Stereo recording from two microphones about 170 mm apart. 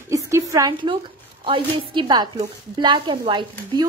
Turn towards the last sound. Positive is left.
turn(degrees=-30)  # may be behind; listen again after turning